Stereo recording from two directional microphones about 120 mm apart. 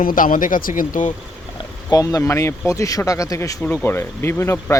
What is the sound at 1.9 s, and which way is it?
Speech, 30° left (ahead or behind).